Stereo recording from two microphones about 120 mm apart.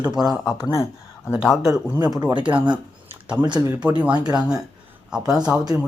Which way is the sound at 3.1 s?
15° right (ahead or behind).